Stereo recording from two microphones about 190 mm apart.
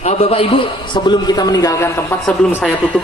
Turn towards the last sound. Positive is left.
turn(degrees=5)  # may be behind; listen again after turning